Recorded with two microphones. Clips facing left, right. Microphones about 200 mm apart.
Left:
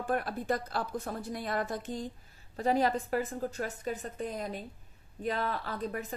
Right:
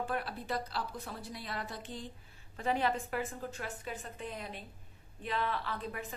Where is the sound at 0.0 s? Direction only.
45° left (ahead or behind).